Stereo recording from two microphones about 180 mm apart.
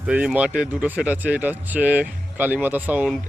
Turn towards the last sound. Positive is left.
turn(degrees=-10)  # may be behind; listen again after turning